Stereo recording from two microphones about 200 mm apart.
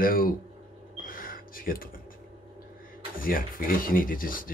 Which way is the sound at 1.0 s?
45° left (ahead or behind).